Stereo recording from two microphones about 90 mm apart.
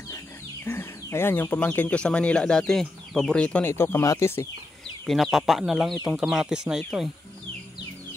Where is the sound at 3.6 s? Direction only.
25° left (ahead or behind).